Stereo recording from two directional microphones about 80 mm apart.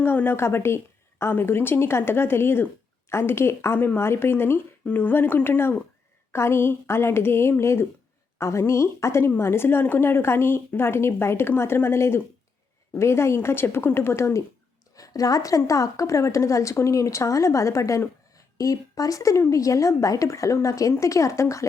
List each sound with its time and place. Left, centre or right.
0.0 s a woman's voice: left
14.9 s a woman's voice: left